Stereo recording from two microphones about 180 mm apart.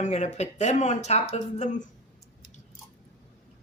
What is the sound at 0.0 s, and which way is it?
Speech, 40° left (ahead or behind).